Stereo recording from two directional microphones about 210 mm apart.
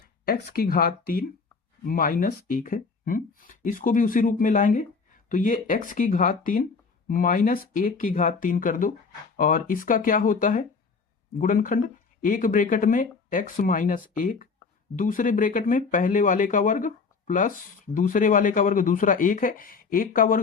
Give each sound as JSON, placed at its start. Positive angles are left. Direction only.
{"t": 0.3, "sound": "speech", "side_deg": 45}